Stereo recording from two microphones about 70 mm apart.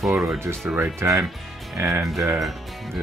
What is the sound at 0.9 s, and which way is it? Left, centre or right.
Speech, right.